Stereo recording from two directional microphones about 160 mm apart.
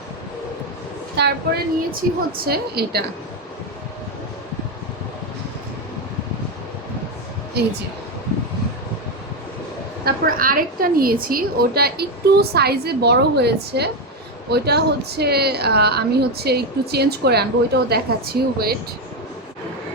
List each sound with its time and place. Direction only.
1.2 s a woman's voice: 90° right
1.9 s a woman's voice: 65° right (ahead or behind)
7.6 s a woman's voice: 90° right
10.0 s a woman's voice: 65° right (ahead or behind)